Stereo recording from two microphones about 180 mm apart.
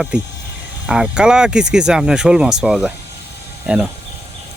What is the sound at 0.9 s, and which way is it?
Speech, 5° right (ahead or behind).